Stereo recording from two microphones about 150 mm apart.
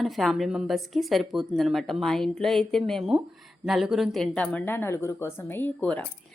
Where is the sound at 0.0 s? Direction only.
Centre (ahead or behind).